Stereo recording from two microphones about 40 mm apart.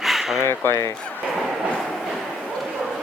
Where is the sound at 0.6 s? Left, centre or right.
Left.